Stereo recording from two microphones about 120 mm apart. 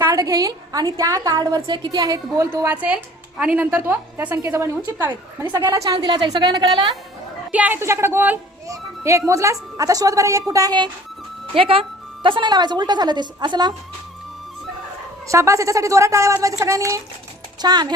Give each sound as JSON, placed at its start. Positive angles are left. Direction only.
{"t": 0.0, "sound": "a woman's voice", "side_deg": -30}
{"t": 7.5, "sound": "a woman's voice", "side_deg": -15}
{"t": 11.5, "sound": "speech", "side_deg": -50}
{"t": 15.3, "sound": "a woman's voice", "side_deg": -25}